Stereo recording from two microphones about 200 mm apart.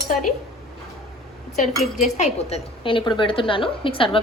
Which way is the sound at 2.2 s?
30° left (ahead or behind).